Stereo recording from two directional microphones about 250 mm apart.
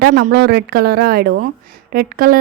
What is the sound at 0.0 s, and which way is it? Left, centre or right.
Speech, right.